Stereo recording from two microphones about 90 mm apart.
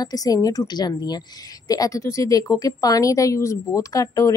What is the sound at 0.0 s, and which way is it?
A woman's voice, 40° left (ahead or behind).